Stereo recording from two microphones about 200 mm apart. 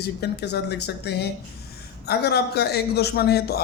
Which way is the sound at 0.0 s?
55° left (ahead or behind).